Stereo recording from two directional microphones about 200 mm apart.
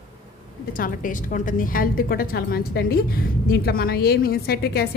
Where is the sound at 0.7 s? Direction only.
45° left (ahead or behind).